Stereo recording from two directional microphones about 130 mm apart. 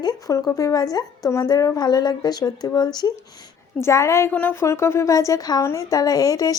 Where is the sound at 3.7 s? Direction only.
20° left (ahead or behind).